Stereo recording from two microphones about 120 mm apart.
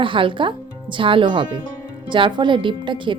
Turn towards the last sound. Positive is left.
turn(degrees=-40)  # may be behind; listen again after turning